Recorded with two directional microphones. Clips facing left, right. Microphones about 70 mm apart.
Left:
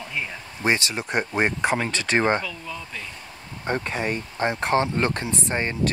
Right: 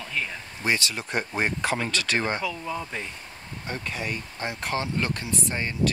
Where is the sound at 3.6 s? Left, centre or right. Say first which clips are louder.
Left 7 dB; left.